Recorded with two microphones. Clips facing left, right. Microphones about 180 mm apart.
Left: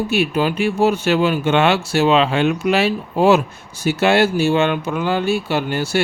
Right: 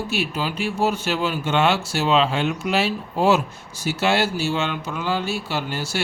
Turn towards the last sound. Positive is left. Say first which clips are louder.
# left 7 dB
turn(degrees=60)  # may be behind; listen again after turning